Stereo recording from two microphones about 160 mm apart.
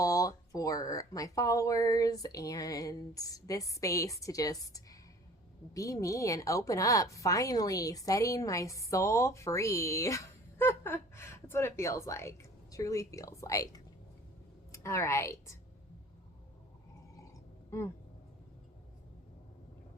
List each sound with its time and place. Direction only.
0.0 s a woman's voice: 20° left (ahead or behind)